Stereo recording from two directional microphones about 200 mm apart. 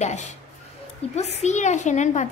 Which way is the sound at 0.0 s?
35° left (ahead or behind).